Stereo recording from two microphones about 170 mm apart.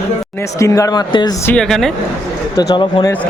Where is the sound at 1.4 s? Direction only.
5° left (ahead or behind).